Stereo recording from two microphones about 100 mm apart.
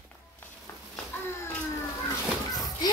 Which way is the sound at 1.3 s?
25° left (ahead or behind).